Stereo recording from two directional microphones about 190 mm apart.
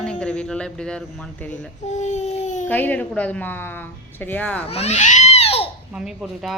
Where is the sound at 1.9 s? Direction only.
40° left (ahead or behind).